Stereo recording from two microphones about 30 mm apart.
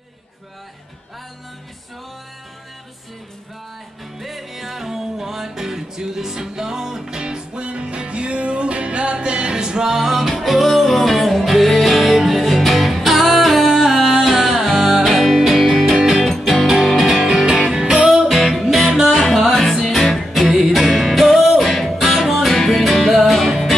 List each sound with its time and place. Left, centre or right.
4.2 s music: centre; by 9.9 s right
9.9 s music: centre
10.4 s music: centre
16.0 s music: centre
16.3 s music: centre
18.9 s music: right
19.1 s music: centre